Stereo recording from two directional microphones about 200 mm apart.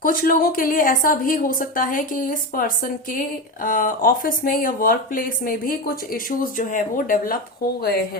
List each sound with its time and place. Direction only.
0.0 s a woman's voice: 45° left (ahead or behind)